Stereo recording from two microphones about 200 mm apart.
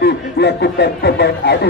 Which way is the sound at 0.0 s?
60° left (ahead or behind).